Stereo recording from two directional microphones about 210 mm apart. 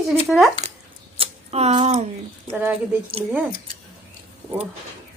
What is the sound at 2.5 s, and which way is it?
Speech, 5° right (ahead or behind).